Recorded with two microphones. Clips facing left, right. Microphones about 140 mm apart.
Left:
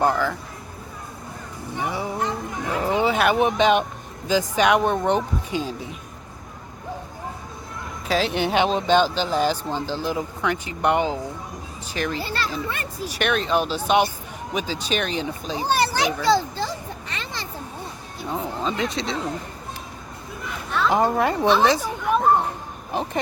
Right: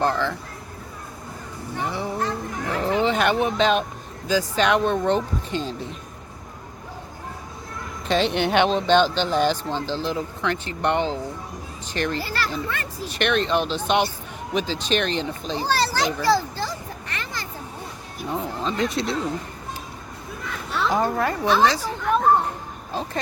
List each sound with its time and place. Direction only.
0.0 s speech: 10° left (ahead or behind)
1.8 s a sound: 15° left (ahead or behind)
3.3 s speech: 15° left (ahead or behind)
8.0 s speech: 5° left (ahead or behind)
12.2 s speech: 25° left (ahead or behind)
13.1 s speech: 5° left (ahead or behind)
15.9 s children playing: 20° left (ahead or behind)
18.3 s speech: centre (ahead or behind)
20.9 s speech: 20° left (ahead or behind)